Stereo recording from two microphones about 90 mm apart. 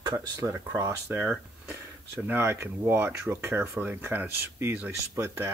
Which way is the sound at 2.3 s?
25° right (ahead or behind).